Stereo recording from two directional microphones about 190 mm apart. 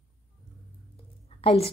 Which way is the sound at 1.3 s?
30° left (ahead or behind).